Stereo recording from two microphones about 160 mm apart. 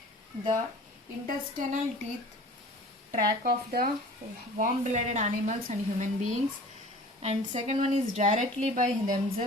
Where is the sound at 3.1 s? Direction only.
65° right (ahead or behind).